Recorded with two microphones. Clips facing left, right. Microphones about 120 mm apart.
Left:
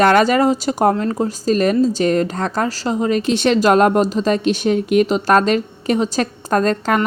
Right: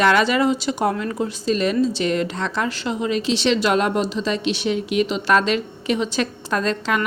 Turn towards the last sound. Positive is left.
turn(degrees=45)  # may be behind; listen again after turning